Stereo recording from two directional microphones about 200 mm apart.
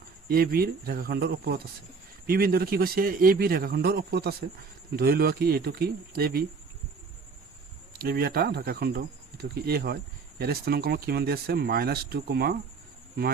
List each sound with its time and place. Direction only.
0.3 s speech: 50° right (ahead or behind)
7.9 s speech: 50° right (ahead or behind)